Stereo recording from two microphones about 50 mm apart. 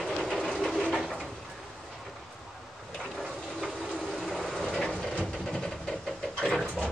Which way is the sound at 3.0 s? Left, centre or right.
Centre.